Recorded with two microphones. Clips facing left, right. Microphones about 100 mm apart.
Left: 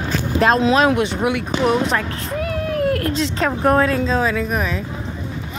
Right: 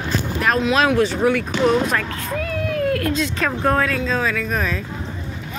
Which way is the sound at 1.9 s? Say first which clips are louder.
Left 1 dB; 25° left (ahead or behind).